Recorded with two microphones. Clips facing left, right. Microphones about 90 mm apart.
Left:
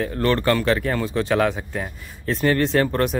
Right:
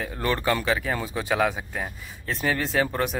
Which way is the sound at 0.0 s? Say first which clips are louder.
Left 5 dB; 10° right (ahead or behind).